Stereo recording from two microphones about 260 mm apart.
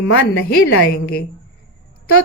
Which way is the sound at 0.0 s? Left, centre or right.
Left.